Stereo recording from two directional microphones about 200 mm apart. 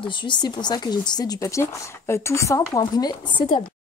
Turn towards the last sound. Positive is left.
turn(degrees=20)  # may be behind; listen again after turning